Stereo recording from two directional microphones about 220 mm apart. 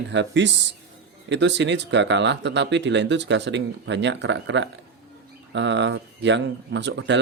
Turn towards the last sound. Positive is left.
turn(degrees=-55)  # may be behind; listen again after turning